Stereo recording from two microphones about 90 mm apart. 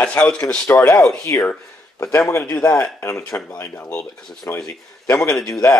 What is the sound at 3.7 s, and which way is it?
Speech, 15° left (ahead or behind).